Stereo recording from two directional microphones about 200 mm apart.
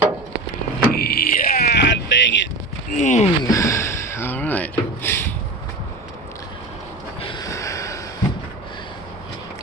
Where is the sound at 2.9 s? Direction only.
40° left (ahead or behind).